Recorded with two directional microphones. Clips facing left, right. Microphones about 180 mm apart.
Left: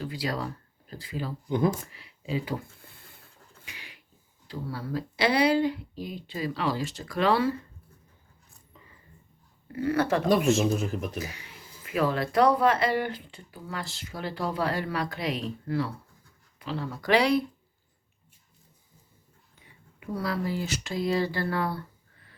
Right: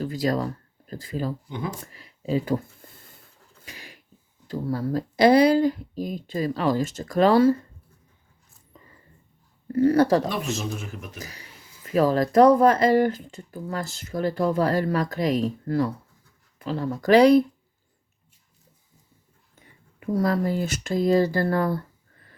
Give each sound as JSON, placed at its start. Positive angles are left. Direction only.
{"t": 0.0, "sound": "speech", "side_deg": -45}
{"t": 1.5, "sound": "speech", "side_deg": 45}
{"t": 1.9, "sound": "speech", "side_deg": -45}
{"t": 3.7, "sound": "a sound", "side_deg": -40}
{"t": 4.4, "sound": "speech", "side_deg": -45}
{"t": 9.7, "sound": "speech", "side_deg": -40}
{"t": 10.7, "sound": "speech", "side_deg": 35}
{"t": 11.2, "sound": "speech", "side_deg": -40}
{"t": 19.5, "sound": "speech", "side_deg": -45}